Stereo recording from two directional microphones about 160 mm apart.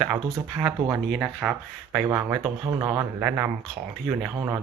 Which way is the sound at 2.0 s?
20° right (ahead or behind).